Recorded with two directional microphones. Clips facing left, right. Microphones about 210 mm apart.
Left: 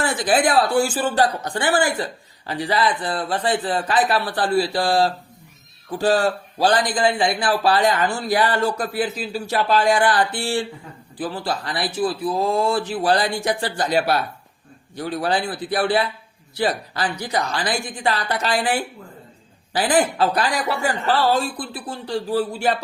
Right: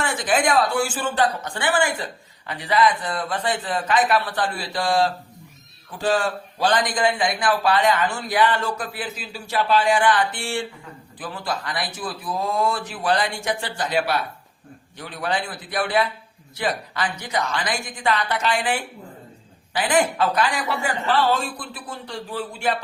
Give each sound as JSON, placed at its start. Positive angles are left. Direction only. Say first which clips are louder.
{"t": 0.0, "sound": "speech", "louder": "left 3 dB", "side_deg": 35}